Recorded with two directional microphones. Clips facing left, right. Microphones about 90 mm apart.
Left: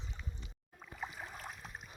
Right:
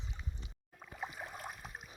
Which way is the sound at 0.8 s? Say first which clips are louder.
Right 1 dB; 5° right (ahead or behind).